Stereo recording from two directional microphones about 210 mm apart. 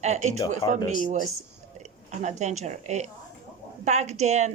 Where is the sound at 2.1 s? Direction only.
35° right (ahead or behind).